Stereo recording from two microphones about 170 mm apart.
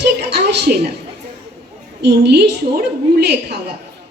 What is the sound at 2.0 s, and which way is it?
A woman's voice, 75° right (ahead or behind).